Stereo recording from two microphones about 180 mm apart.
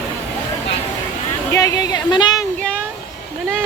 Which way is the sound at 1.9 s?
25° left (ahead or behind).